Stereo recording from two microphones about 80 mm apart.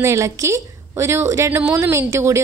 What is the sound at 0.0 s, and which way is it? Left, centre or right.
A woman's voice, right.